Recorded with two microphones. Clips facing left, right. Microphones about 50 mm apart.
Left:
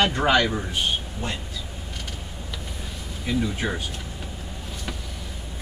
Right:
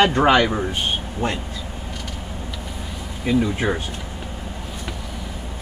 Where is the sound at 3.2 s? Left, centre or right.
Right.